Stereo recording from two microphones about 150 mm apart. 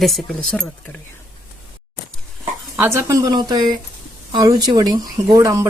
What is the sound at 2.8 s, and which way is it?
Speech, 15° right (ahead or behind).